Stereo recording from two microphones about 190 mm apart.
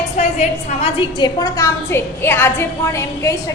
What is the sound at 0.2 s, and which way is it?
A woman's voice, 35° left (ahead or behind).